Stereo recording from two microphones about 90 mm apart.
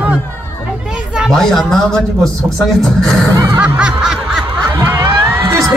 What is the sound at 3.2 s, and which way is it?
Snicker, 35° right (ahead or behind).